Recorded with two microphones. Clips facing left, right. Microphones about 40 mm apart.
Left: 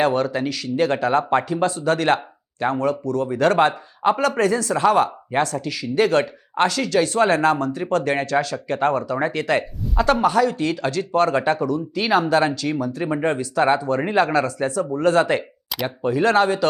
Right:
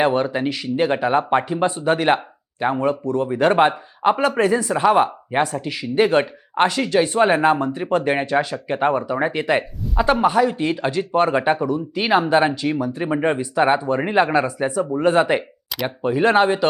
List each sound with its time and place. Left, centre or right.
0.0 s speech: centre
15.7 s speech: centre
16.0 s speech: right